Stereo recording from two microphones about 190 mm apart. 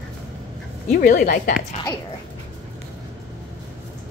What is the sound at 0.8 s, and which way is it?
Speech, 40° left (ahead or behind).